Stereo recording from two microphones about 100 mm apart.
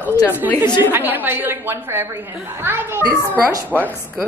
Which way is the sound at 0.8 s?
20° right (ahead or behind).